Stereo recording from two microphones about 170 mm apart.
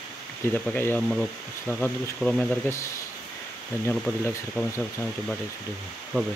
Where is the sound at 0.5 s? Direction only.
10° left (ahead or behind).